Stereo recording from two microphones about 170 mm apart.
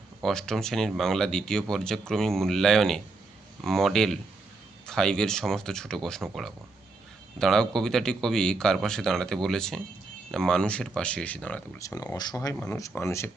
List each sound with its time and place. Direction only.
0.2 s speech: 5° left (ahead or behind)
7.3 s speech: 5° left (ahead or behind)
11.8 s speech: 20° left (ahead or behind)